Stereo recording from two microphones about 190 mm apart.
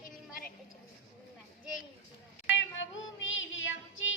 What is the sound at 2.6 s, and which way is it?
Music, 85° left.